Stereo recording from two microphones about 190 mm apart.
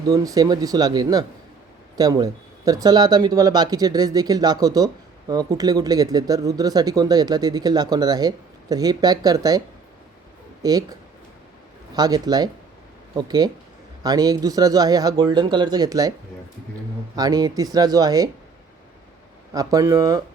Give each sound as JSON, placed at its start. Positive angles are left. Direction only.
{"t": 0.1, "sound": "speech", "side_deg": -20}
{"t": 11.9, "sound": "speech", "side_deg": -20}
{"t": 17.2, "sound": "speech", "side_deg": -20}
{"t": 19.5, "sound": "speech", "side_deg": -20}